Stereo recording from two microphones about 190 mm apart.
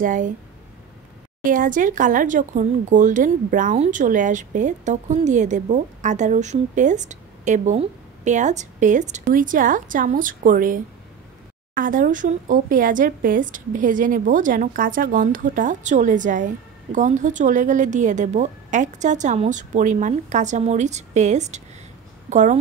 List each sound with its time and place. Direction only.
0.0 s speech: 45° right (ahead or behind)
1.4 s speech: 45° right (ahead or behind)